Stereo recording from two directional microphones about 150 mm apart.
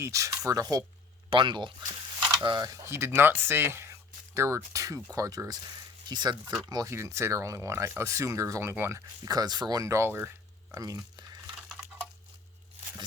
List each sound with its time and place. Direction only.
0.0 s speech: 20° right (ahead or behind)